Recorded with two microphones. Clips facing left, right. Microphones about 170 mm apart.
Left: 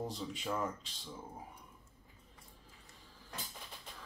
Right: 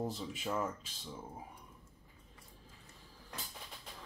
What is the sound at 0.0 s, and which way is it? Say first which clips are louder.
Speech: right 1 dB; 5° right (ahead or behind).